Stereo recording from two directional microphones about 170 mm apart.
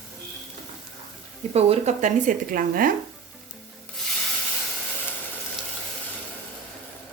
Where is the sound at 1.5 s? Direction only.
35° right (ahead or behind); by 2.9 s 55° right (ahead or behind).